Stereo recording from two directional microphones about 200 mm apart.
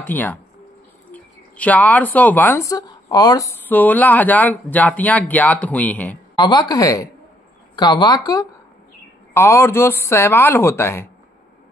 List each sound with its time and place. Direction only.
0.0 s speech: 10° left (ahead or behind)
3.6 s speech: 10° left (ahead or behind)
6.3 s speech: 20° left (ahead or behind)